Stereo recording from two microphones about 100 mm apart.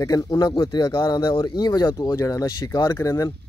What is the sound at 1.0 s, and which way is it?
Speech, 30° left (ahead or behind).